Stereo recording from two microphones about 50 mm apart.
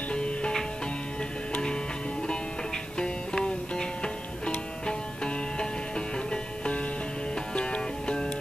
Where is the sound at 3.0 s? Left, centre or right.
Centre.